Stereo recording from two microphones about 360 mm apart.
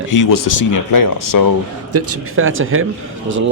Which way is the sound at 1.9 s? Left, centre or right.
Right.